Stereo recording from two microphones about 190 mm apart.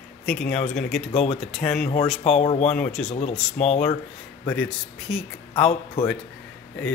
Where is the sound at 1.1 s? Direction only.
35° left (ahead or behind).